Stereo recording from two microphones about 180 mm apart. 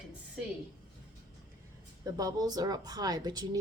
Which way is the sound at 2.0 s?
20° right (ahead or behind).